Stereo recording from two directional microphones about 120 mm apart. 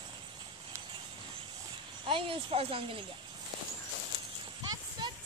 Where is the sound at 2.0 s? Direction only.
50° right (ahead or behind).